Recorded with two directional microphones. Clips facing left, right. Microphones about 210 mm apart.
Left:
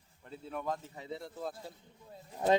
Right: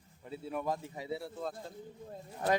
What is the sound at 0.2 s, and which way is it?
Speech, 5° right (ahead or behind).